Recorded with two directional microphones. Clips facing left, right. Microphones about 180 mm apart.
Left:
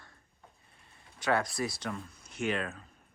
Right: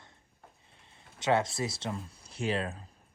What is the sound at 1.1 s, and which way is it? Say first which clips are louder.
Speech: right 2 dB; 25° right (ahead or behind).